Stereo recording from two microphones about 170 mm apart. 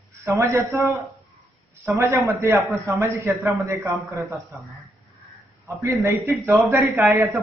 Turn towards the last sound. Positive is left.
turn(degrees=-15)  # may be behind; listen again after turning